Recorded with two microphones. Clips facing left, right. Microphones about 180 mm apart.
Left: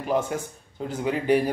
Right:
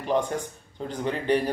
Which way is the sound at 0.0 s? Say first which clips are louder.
Even; 5° left (ahead or behind).